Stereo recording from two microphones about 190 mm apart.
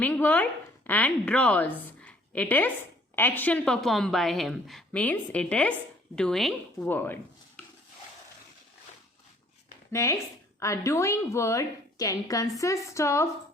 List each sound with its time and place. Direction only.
0.0 s a woman's voice: 10° left (ahead or behind)
2.0 s a sound: 5° left (ahead or behind)
3.2 s a woman's voice: 10° left (ahead or behind)
9.9 s a woman's voice: 15° left (ahead or behind)